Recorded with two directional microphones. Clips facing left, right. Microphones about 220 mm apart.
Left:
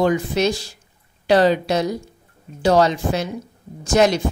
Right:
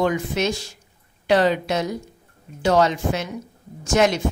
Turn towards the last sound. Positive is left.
turn(degrees=35)  # may be behind; listen again after turning